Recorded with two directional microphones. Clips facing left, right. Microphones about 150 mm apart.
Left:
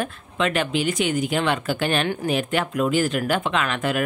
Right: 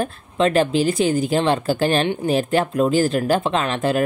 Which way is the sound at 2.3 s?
35° right (ahead or behind).